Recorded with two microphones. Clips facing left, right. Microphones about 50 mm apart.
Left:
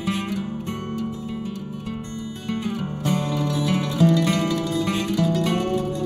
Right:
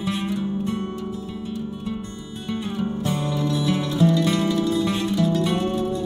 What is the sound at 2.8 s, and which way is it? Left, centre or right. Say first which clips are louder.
Music: even; left.